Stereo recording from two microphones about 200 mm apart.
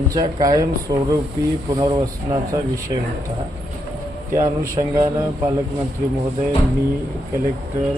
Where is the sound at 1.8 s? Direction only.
15° right (ahead or behind).